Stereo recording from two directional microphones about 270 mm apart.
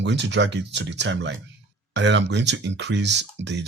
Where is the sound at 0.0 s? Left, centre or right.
Right.